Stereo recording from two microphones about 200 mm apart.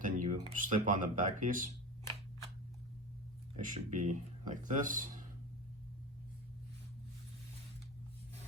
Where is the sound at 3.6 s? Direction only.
40° right (ahead or behind).